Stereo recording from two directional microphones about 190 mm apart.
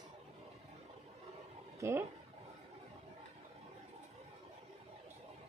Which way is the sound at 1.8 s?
15° right (ahead or behind).